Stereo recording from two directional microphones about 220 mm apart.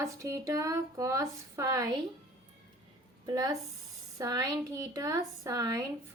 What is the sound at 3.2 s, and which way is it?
A woman's voice, 15° right (ahead or behind).